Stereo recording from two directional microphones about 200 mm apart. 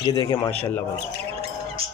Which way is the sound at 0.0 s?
20° left (ahead or behind).